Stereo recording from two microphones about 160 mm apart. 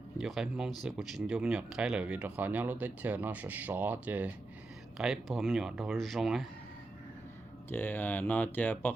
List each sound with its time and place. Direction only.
0.2 s speech: 5° right (ahead or behind)
7.7 s speech: 10° left (ahead or behind)